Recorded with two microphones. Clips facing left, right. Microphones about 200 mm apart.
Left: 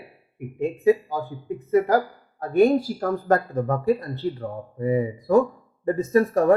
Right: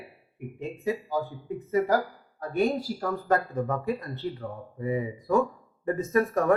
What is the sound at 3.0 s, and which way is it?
Speech, 40° left (ahead or behind).